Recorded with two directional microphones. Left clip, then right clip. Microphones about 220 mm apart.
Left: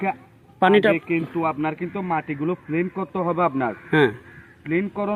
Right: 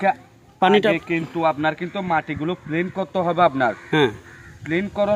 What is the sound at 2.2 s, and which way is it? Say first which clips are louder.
Speech: even; 50° right (ahead or behind).